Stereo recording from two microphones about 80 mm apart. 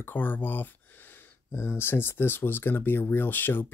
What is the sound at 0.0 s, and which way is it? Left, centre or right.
Speech, left.